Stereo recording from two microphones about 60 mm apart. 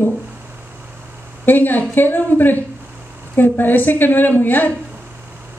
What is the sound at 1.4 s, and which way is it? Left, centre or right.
A woman's voice, left.